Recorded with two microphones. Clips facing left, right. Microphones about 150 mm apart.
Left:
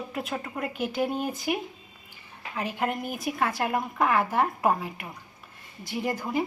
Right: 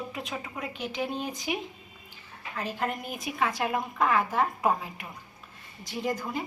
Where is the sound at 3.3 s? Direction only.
50° left (ahead or behind).